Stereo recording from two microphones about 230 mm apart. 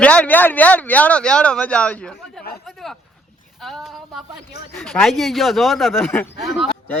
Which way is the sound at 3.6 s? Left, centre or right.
Centre.